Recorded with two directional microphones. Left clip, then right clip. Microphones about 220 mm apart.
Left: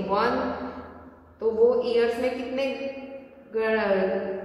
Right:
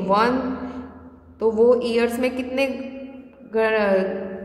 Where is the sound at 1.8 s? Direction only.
50° right (ahead or behind).